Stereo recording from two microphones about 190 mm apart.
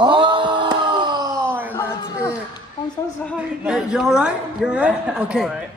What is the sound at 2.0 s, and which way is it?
Speech, 20° left (ahead or behind).